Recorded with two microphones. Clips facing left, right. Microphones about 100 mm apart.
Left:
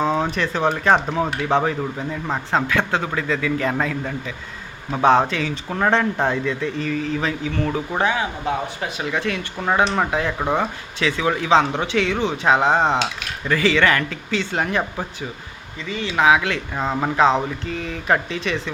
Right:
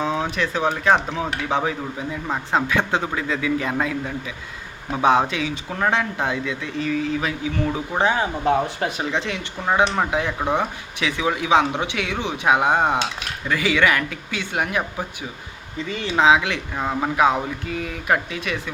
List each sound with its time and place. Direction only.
0.0 s speech: centre (ahead or behind)
2.5 s speech: 15° right (ahead or behind)
5.7 s speech: centre (ahead or behind)
8.1 s speech: 40° right (ahead or behind)
9.0 s speech: 20° right (ahead or behind)
16.1 s speech: 20° right (ahead or behind)